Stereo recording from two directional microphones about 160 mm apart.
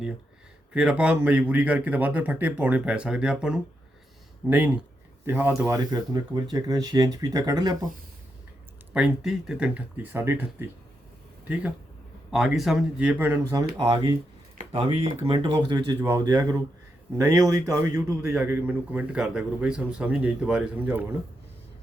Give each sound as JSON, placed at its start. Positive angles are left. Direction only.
{"t": 0.7, "sound": "a man's voice", "side_deg": -5}
{"t": 8.9, "sound": "a man's voice", "side_deg": -5}
{"t": 13.5, "sound": "speech", "side_deg": -20}
{"t": 15.4, "sound": "a man's voice", "side_deg": -25}